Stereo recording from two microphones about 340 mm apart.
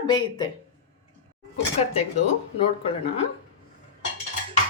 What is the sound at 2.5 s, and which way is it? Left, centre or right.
Speech, centre.